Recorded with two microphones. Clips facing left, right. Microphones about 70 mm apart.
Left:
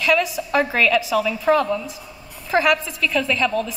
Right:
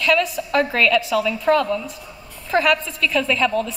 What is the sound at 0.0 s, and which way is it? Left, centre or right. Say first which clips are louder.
A woman's voice: even; centre.